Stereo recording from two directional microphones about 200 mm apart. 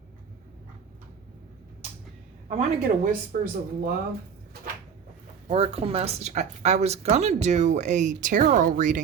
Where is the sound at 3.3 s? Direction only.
45° right (ahead or behind).